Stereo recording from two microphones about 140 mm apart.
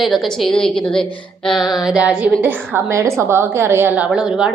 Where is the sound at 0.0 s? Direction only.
Centre (ahead or behind).